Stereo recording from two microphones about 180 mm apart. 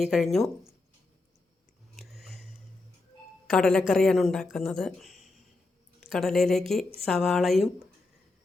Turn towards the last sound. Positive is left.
turn(degrees=0)  # may be behind; listen again after turning